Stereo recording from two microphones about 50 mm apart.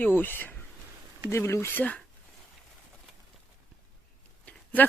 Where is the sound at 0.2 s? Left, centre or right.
Left.